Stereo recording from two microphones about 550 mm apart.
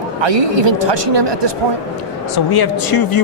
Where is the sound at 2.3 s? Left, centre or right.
Left.